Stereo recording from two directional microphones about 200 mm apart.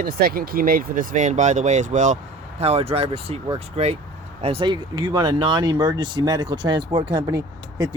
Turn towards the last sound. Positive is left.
turn(degrees=-20)  # may be behind; listen again after turning